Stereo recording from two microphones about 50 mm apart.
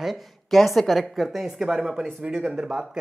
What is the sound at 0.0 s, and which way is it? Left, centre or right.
A woman's voice, centre.